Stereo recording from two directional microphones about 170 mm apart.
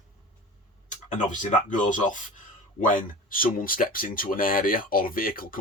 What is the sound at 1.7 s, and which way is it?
Speech, 50° left (ahead or behind).